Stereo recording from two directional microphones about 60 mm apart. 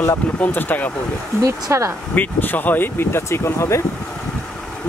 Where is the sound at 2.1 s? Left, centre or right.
Left.